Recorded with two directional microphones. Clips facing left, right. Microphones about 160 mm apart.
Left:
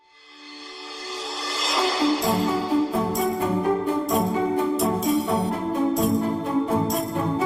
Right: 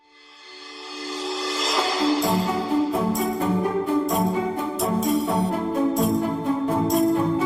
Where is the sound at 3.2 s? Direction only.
Centre (ahead or behind).